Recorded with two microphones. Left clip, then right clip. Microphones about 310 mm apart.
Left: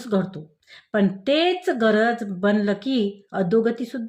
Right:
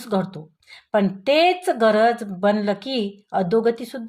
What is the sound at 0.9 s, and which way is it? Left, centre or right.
Speech, right.